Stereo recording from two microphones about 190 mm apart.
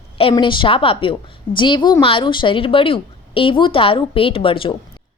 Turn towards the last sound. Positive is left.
turn(degrees=25)  # may be behind; listen again after turning